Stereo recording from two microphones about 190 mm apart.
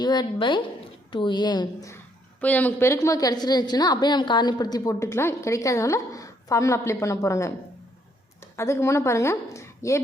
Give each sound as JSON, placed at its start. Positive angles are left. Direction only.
{"t": 0.0, "sound": "a woman's voice", "side_deg": 20}
{"t": 2.4, "sound": "a woman's voice", "side_deg": 10}
{"t": 8.5, "sound": "a woman's voice", "side_deg": 15}